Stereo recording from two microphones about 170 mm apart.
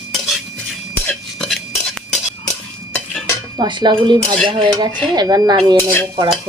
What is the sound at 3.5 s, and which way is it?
Cutlery, 25° right (ahead or behind).